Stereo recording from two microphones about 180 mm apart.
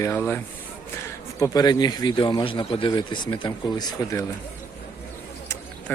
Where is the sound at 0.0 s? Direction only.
10° left (ahead or behind).